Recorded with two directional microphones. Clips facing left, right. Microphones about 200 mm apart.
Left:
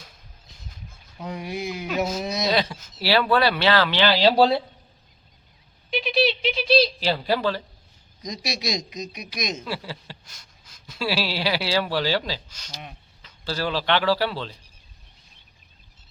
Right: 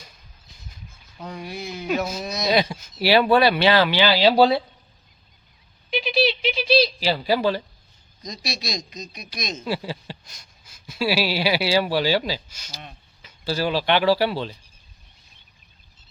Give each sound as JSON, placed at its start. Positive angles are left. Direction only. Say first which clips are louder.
{"t": 1.3, "sound": "speech", "louder": "left 3 dB", "side_deg": 15}
{"t": 2.4, "sound": "speech", "louder": "right 4 dB", "side_deg": -15}
{"t": 5.9, "sound": "a sound", "louder": "right 1 dB", "side_deg": 0}
{"t": 8.2, "sound": "speech", "louder": "left 2 dB", "side_deg": 15}
{"t": 9.6, "sound": "speech", "louder": "right 5 dB", "side_deg": -15}